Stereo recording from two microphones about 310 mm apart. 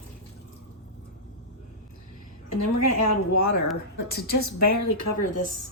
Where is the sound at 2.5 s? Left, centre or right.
Left.